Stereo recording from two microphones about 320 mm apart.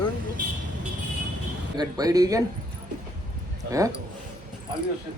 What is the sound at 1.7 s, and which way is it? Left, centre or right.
Speech, centre.